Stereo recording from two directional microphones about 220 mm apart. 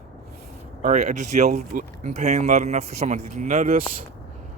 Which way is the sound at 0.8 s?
35° right (ahead or behind).